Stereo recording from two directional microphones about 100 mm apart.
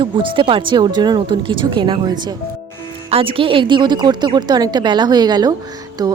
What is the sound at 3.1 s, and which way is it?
Speech, 65° right (ahead or behind).